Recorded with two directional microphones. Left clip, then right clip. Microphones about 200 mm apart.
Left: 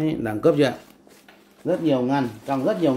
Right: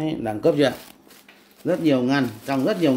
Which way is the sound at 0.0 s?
5° left (ahead or behind).